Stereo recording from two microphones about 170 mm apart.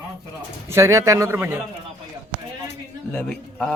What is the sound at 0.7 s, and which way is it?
Speech, 15° right (ahead or behind).